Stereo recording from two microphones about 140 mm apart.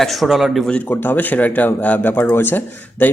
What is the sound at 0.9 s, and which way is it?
Speech, 15° left (ahead or behind).